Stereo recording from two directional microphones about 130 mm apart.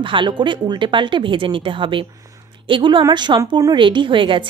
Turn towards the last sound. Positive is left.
turn(degrees=-40)  # may be behind; listen again after turning